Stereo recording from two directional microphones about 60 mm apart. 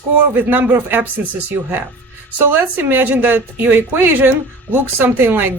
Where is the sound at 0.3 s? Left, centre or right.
Right.